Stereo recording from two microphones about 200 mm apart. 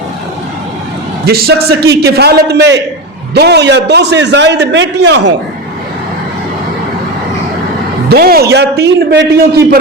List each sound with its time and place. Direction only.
1.2 s a man's voice: 50° right (ahead or behind)
8.1 s a man's voice: 50° right (ahead or behind)